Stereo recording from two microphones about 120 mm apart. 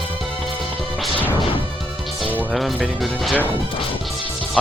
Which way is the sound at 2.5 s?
Centre (ahead or behind).